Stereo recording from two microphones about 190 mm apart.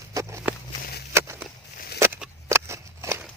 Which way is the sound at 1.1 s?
15° right (ahead or behind).